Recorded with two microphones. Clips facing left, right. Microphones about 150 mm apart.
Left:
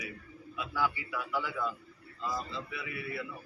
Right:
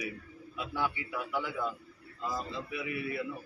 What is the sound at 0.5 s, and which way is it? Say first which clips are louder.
A man's voice: left 1 dB; 25° right (ahead or behind).